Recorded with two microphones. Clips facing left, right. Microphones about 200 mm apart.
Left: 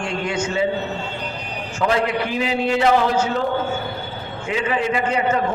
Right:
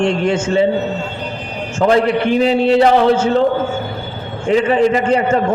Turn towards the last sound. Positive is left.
turn(degrees=-35)  # may be behind; listen again after turning